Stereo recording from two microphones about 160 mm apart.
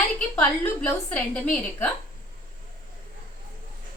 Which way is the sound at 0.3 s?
10° left (ahead or behind).